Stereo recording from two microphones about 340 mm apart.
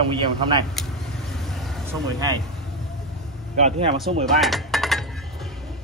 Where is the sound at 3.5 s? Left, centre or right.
Centre.